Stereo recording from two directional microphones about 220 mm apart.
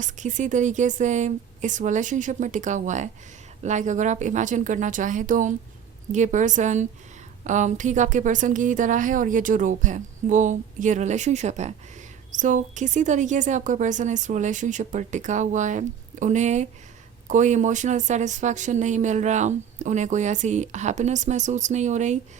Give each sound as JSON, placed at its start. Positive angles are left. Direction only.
{"t": 0.0, "sound": "speech", "side_deg": -35}